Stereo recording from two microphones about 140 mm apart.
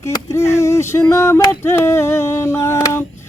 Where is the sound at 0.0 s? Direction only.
20° left (ahead or behind).